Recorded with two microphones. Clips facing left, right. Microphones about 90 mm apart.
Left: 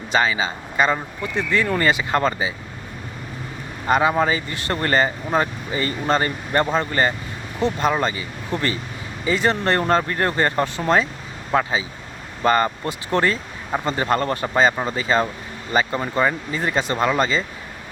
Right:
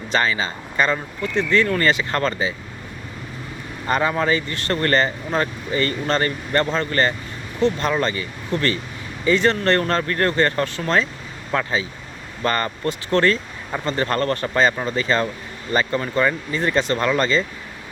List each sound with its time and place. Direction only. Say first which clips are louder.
0.1 s speech: left 1 dB; 15° left (ahead or behind)
3.8 s speech: left 2 dB; 15° left (ahead or behind)